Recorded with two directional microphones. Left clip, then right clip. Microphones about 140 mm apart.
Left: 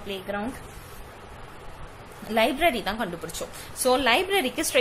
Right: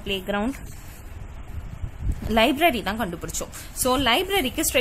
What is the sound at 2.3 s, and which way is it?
A woman's voice, 50° right (ahead or behind).